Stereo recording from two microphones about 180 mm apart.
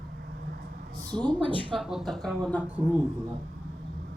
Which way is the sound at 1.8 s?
Centre (ahead or behind).